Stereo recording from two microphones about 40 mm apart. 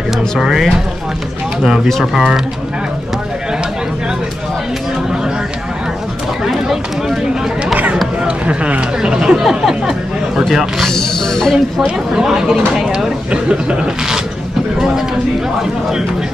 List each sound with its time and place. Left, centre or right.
0.4 s speech: centre
6.4 s run: centre
8.2 s speech: right
9.1 s speech: right
10.9 s speech: centre
12.2 s speech: centre
13.3 s speech: right